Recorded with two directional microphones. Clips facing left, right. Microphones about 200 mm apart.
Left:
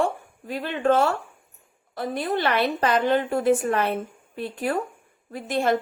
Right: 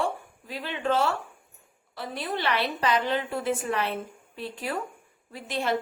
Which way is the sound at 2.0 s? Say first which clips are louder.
Left 6 dB; 50° left (ahead or behind).